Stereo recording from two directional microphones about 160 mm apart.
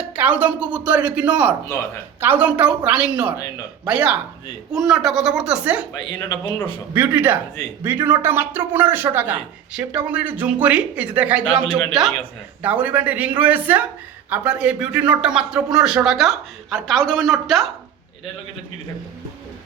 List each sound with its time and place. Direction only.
0.0 s a woman's voice: 10° right (ahead or behind)
5.9 s speech: 20° left (ahead or behind)
6.9 s a woman's voice: 10° right (ahead or behind)